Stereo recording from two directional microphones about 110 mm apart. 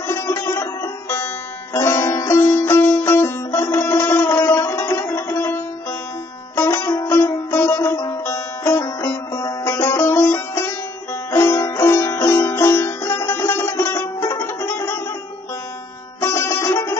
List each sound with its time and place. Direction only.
0.0 s music: 25° left (ahead or behind)
16.2 s music: 25° left (ahead or behind)